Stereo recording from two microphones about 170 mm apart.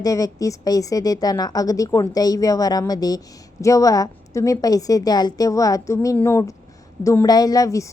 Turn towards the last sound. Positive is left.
turn(degrees=20)  # may be behind; listen again after turning